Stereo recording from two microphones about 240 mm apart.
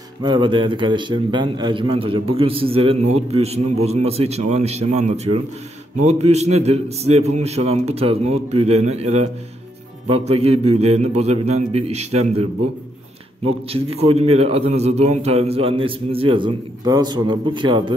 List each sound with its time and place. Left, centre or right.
0.2 s a man's voice: centre
13.5 s a man's voice: right